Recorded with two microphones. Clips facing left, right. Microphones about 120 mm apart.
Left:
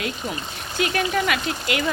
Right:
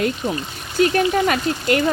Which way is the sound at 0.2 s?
40° right (ahead or behind).